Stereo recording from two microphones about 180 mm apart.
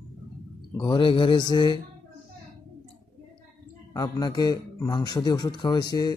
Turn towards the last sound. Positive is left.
turn(degrees=20)  # may be behind; listen again after turning